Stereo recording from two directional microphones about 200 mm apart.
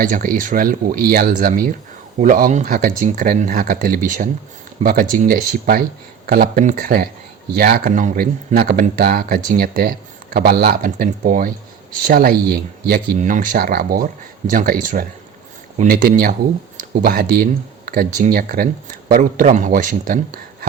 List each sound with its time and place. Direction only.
0.0 s speech: 45° right (ahead or behind)